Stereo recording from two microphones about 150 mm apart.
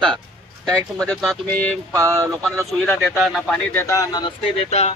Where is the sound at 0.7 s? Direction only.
5° left (ahead or behind).